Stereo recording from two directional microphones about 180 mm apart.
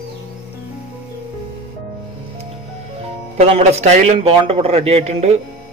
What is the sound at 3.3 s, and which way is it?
A man's voice, 35° right (ahead or behind).